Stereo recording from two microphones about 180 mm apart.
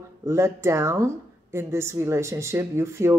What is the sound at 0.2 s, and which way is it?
A woman's voice, 15° right (ahead or behind).